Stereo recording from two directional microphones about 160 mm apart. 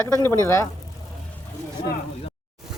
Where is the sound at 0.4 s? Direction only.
20° left (ahead or behind).